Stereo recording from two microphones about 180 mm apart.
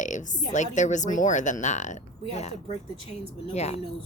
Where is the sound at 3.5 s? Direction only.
35° left (ahead or behind).